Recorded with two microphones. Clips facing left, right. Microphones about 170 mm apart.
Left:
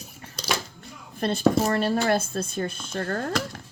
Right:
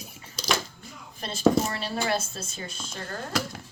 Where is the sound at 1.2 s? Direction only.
55° left (ahead or behind).